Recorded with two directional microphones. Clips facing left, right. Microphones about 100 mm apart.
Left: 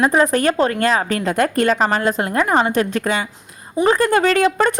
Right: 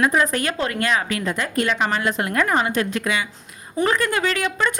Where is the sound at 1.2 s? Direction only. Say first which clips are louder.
Left 6 dB; 55° left (ahead or behind).